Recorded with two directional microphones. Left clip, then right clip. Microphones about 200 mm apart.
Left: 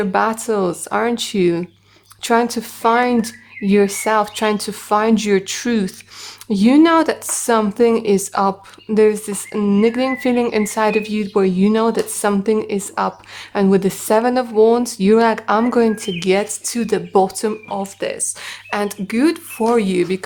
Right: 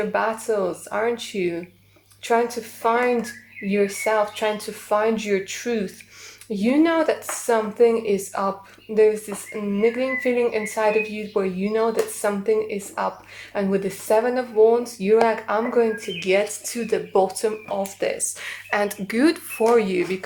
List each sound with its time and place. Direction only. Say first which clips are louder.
0.0 s speech: left 5 dB; 35° left (ahead or behind)